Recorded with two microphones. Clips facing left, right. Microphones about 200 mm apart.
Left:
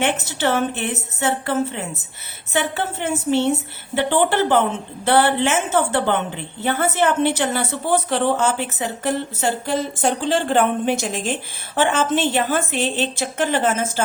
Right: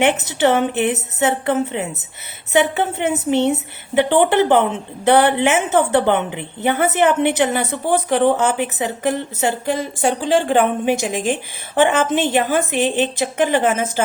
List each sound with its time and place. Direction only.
0.0 s a woman's voice: 20° right (ahead or behind)